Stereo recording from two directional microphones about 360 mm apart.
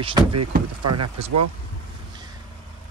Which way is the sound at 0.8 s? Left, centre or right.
Right.